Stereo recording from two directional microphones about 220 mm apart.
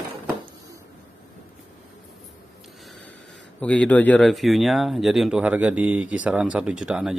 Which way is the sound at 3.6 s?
5° left (ahead or behind).